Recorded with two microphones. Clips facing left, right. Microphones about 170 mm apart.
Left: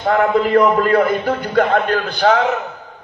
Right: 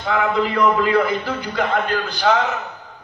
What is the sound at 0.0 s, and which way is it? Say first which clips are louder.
A man's voice: left 5 dB; 50° left (ahead or behind).